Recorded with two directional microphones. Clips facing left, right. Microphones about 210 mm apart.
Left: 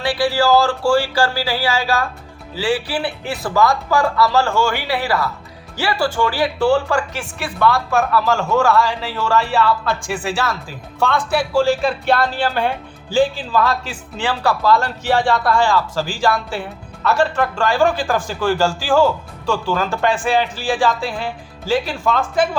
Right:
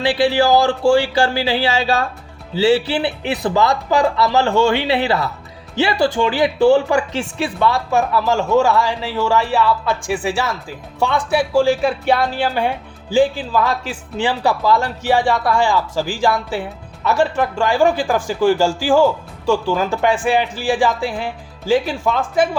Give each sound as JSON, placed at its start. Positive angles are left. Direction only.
{"t": 0.0, "sound": "speech", "side_deg": -20}